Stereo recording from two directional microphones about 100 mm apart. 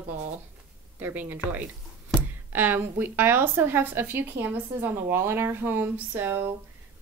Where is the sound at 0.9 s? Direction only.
20° right (ahead or behind).